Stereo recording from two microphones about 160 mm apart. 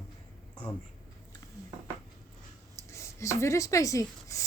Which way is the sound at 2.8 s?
20° left (ahead or behind).